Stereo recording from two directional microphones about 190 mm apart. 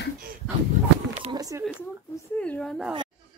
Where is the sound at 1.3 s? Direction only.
20° right (ahead or behind).